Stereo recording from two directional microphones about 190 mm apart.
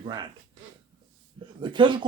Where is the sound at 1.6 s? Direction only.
25° right (ahead or behind).